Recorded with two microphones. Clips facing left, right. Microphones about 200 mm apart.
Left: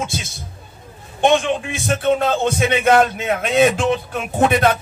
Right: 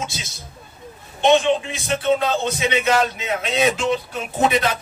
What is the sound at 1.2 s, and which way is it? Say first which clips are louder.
A man's voice: even; 50° left (ahead or behind).